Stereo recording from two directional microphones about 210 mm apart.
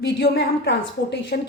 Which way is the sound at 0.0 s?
55° left (ahead or behind).